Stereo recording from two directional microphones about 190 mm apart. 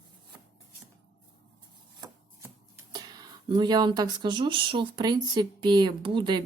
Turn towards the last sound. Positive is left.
turn(degrees=-25)  # may be behind; listen again after turning